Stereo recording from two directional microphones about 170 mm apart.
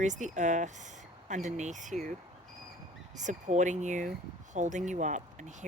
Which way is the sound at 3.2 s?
45° right (ahead or behind).